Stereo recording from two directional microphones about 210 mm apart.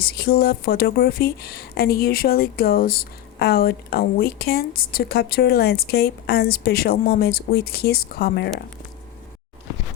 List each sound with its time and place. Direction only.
0.0 s speech: 50° left (ahead or behind)